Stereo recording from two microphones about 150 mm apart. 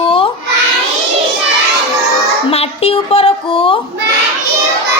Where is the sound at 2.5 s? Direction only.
40° left (ahead or behind).